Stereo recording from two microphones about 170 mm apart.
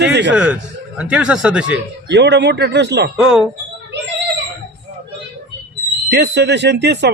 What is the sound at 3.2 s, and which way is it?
Speech, 5° right (ahead or behind).